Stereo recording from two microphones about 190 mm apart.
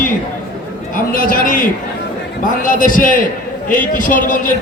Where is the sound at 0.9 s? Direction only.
45° left (ahead or behind).